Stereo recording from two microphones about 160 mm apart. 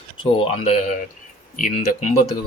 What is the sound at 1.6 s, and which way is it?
Speech, 55° left (ahead or behind).